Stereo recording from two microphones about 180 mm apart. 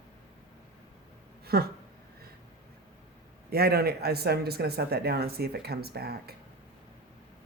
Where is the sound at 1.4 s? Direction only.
60° right (ahead or behind).